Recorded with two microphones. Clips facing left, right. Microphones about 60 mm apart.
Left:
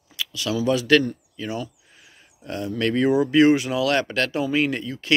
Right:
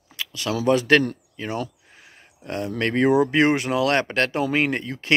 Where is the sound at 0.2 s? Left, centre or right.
Right.